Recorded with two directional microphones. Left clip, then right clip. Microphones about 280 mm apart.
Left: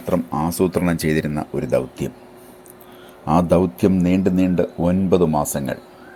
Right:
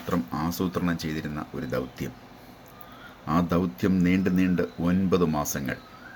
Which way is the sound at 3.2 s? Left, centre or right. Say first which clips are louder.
Left 10 dB; left.